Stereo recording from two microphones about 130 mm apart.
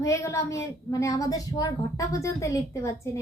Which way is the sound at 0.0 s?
25° left (ahead or behind).